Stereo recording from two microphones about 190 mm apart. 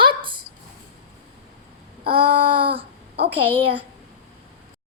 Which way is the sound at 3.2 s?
25° right (ahead or behind).